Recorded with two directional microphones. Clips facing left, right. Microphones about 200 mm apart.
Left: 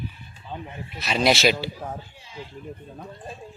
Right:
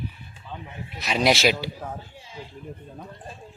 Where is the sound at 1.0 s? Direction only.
15° right (ahead or behind).